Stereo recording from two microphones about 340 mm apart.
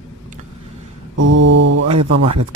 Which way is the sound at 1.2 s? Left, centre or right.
Right.